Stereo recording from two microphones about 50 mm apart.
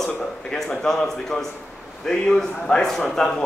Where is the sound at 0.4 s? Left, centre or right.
Centre.